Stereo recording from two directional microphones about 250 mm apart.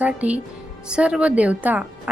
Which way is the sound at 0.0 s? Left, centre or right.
Centre.